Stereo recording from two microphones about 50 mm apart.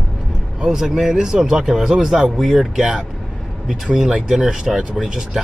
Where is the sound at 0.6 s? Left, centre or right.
Centre.